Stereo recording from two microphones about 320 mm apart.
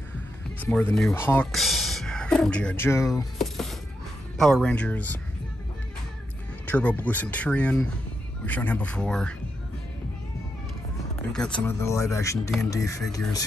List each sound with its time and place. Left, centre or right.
0.6 s speech: centre
6.6 s speech: centre
11.3 s speech: centre